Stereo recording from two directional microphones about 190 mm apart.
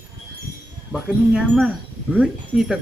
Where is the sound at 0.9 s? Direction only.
Centre (ahead or behind).